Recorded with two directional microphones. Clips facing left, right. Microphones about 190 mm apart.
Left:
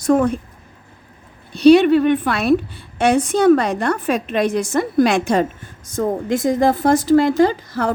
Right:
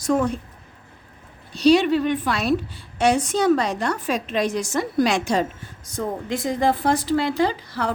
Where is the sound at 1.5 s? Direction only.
60° left (ahead or behind).